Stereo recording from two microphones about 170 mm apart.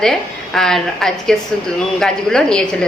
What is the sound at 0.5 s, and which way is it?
Speech, centre (ahead or behind).